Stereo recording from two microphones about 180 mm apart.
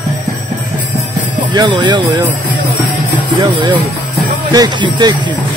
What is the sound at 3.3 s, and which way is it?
Speech, 25° right (ahead or behind).